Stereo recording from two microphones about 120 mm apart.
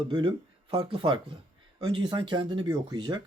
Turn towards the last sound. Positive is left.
turn(degrees=-40)  # may be behind; listen again after turning